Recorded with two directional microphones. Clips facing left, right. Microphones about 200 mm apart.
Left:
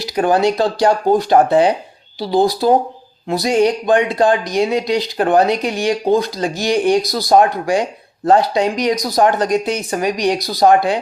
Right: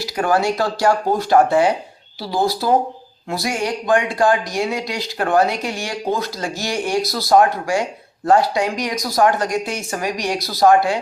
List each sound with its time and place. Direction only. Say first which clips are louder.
0.0 s speech: left 4 dB; 20° left (ahead or behind)